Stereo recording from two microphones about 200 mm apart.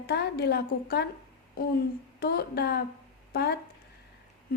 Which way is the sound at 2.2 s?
50° left (ahead or behind).